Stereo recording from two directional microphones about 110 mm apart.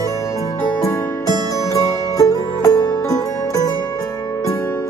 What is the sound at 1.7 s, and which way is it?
Music, 30° left (ahead or behind).